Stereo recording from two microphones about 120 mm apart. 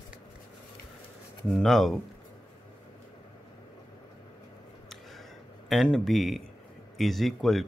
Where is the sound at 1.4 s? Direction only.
Centre (ahead or behind).